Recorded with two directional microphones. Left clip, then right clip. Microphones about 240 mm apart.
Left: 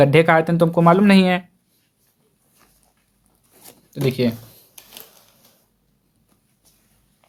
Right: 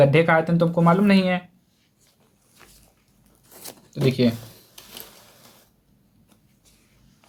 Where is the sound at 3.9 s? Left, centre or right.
Left.